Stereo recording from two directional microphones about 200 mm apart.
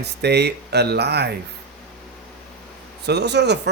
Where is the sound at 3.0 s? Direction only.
55° right (ahead or behind).